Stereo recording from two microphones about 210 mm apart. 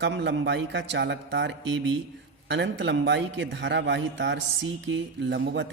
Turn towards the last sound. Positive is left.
turn(degrees=-60)  # may be behind; listen again after turning